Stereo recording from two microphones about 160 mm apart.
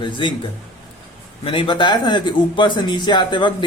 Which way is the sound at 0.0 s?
30° left (ahead or behind).